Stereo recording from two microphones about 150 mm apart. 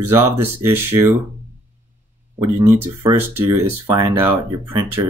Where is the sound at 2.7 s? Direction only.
20° right (ahead or behind).